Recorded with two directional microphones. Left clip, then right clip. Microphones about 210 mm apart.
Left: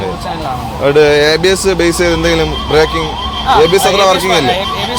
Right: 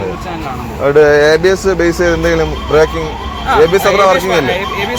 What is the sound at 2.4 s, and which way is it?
Speech, 10° left (ahead or behind).